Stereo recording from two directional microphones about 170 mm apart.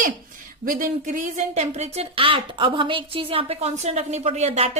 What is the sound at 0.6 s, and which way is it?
A woman's voice, 50° right (ahead or behind).